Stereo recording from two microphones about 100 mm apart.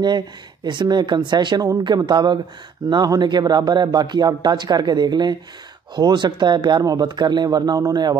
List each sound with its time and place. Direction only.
0.7 s speech: 50° right (ahead or behind)